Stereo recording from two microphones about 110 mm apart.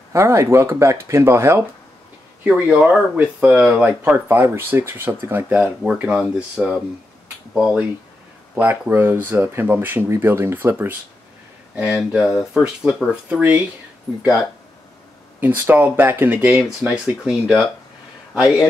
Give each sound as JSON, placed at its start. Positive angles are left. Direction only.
{"t": 0.1, "sound": "speech", "side_deg": -25}
{"t": 2.4, "sound": "speech", "side_deg": -10}
{"t": 8.5, "sound": "speech", "side_deg": -15}
{"t": 11.7, "sound": "speech", "side_deg": -10}
{"t": 13.1, "sound": "speech", "side_deg": -15}
{"t": 15.4, "sound": "speech", "side_deg": -15}
{"t": 16.9, "sound": "a man's voice", "side_deg": -5}